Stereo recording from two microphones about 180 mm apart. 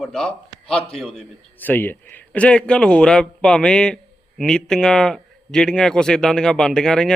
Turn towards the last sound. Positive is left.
turn(degrees=5)  # may be behind; listen again after turning